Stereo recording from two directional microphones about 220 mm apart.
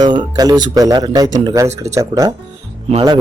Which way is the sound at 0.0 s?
20° right (ahead or behind).